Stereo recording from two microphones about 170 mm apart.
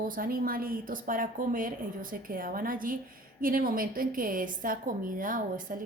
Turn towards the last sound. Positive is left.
turn(degrees=-55)  # may be behind; listen again after turning